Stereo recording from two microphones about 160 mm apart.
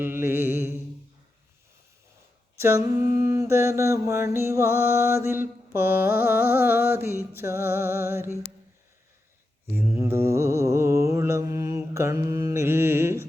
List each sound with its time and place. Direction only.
0.0 s mantra: 15° right (ahead or behind)
2.6 s mantra: 15° right (ahead or behind)
9.7 s mantra: 15° right (ahead or behind)